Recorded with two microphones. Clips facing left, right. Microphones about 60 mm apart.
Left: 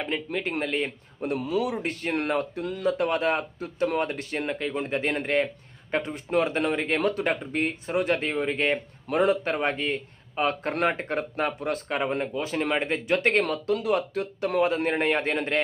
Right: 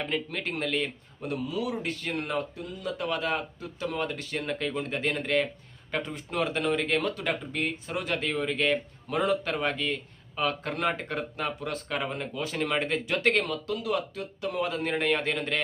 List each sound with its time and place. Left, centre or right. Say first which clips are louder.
0.0 s speech: left 2 dB; centre
1.2 s speech: left 5 dB; left
1.7 s speech: left 3 dB; left
14.8 s speech: left 3 dB; left